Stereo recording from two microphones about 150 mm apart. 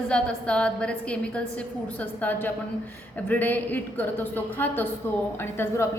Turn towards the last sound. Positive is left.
turn(degrees=15)  # may be behind; listen again after turning